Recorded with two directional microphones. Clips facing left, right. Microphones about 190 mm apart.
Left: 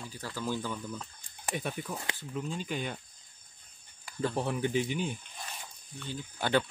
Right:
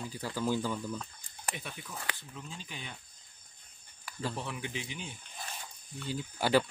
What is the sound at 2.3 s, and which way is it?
Speech, 55° left (ahead or behind).